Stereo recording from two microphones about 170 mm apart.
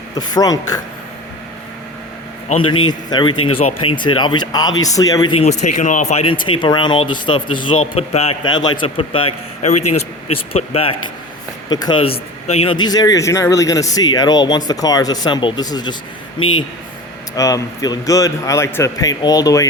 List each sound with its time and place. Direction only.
0.2 s speech: 20° left (ahead or behind)
2.6 s speech: 30° left (ahead or behind)
5.4 s speech: 45° left (ahead or behind)
6.3 s speech: 30° left (ahead or behind)
8.4 s a man's voice: 25° left (ahead or behind)